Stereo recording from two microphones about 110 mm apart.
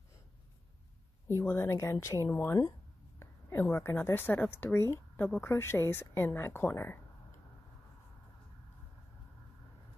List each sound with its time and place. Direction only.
1.2 s a woman's voice: 20° left (ahead or behind)